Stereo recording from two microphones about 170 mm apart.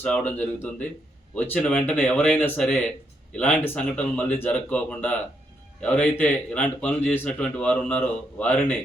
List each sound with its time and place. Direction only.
0.0 s a man's voice: 10° left (ahead or behind)